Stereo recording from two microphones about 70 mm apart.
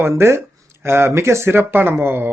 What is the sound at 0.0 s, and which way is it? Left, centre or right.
Speech, right.